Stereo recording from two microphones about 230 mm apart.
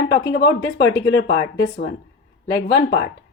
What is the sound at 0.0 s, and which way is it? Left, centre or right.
A woman's voice, left.